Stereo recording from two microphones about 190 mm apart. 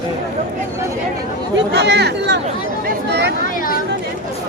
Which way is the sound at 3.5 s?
45° left (ahead or behind).